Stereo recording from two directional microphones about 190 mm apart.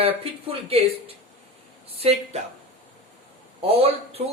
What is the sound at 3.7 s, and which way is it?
Speech, 30° right (ahead or behind).